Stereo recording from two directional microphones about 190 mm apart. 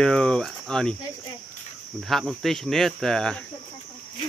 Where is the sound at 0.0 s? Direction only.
5° left (ahead or behind).